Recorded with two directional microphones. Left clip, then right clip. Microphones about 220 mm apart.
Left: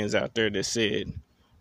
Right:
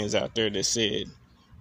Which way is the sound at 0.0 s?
20° left (ahead or behind).